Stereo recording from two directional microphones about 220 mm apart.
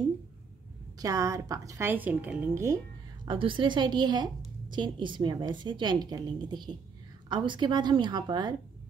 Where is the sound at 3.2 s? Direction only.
20° right (ahead or behind).